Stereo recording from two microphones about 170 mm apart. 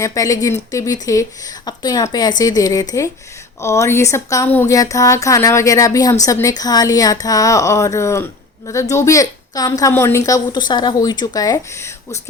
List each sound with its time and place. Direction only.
0.0 s a woman's voice: 20° left (ahead or behind)